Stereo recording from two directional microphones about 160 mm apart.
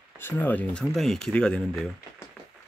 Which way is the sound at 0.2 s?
10° left (ahead or behind).